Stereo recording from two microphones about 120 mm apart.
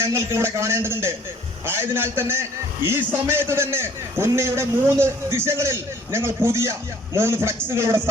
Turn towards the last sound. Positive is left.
turn(degrees=-20)  # may be behind; listen again after turning